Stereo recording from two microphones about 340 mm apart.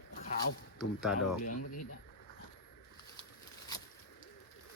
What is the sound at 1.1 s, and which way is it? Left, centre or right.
Speech, left.